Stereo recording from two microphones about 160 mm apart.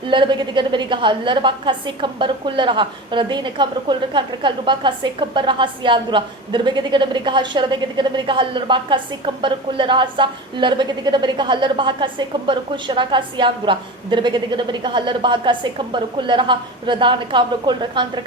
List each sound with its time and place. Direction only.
0.1 s a woman's voice: 30° right (ahead or behind)